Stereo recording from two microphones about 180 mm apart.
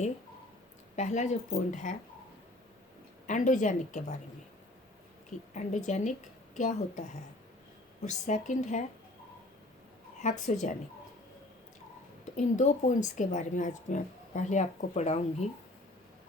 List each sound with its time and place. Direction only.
0.9 s speech: 40° left (ahead or behind)
3.2 s a woman's voice: 45° left (ahead or behind)
5.5 s speech: 40° left (ahead or behind)
8.0 s speech: 40° left (ahead or behind)
10.2 s speech: 40° left (ahead or behind)
12.4 s a woman's voice: 45° left (ahead or behind)